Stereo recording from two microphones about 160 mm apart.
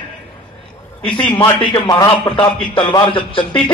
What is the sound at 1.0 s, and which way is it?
A man's voice, 30° left (ahead or behind).